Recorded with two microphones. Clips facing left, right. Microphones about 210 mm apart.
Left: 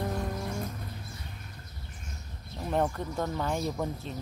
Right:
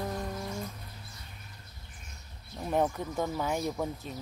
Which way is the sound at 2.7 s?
10° right (ahead or behind).